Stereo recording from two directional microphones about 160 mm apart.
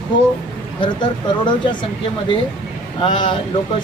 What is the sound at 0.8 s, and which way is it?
Speech, 30° left (ahead or behind).